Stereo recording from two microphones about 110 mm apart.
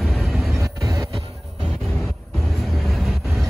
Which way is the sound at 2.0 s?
Centre (ahead or behind).